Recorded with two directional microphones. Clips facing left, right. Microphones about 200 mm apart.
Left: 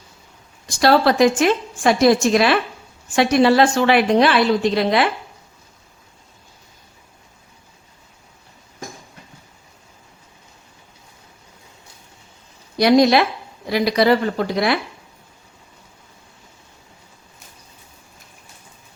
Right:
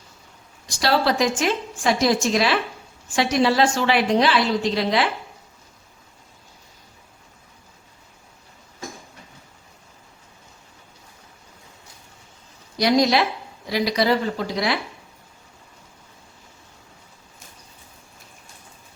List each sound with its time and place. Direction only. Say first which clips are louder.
0.8 s a woman's voice: left 6 dB; 55° left (ahead or behind)
12.7 s a woman's voice: left 5 dB; 60° left (ahead or behind)